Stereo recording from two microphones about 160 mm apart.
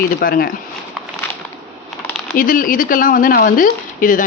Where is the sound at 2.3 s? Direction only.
60° left (ahead or behind).